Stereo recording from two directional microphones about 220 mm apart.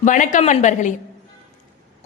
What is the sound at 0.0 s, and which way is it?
Speech, 35° left (ahead or behind).